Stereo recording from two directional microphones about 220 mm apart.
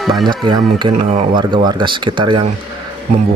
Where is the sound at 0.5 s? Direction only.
20° right (ahead or behind).